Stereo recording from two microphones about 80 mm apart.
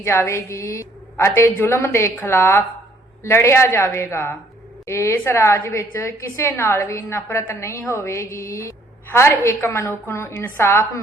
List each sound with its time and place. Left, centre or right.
0.0 s a woman's voice: left